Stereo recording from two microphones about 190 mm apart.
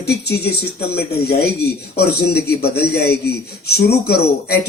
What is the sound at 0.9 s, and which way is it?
A man's voice, 55° left (ahead or behind).